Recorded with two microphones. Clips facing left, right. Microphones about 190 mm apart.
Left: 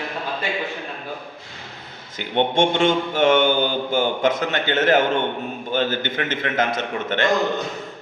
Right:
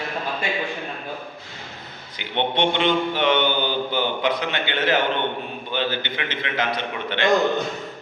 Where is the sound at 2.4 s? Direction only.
45° left (ahead or behind).